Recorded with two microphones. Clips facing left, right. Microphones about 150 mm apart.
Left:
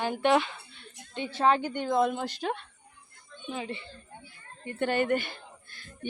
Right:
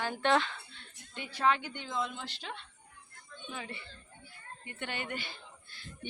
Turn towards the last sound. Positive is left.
turn(degrees=50)  # may be behind; listen again after turning